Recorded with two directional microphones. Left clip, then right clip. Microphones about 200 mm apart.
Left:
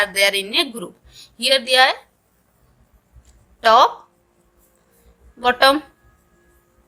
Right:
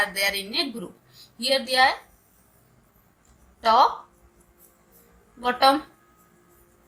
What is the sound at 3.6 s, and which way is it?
Speech, 45° left (ahead or behind).